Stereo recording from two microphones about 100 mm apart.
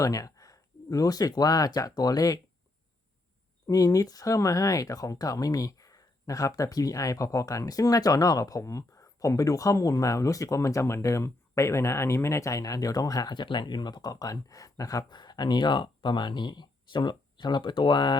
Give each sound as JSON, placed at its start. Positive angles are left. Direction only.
{"t": 0.0, "sound": "speech", "side_deg": 35}
{"t": 3.7, "sound": "speech", "side_deg": 35}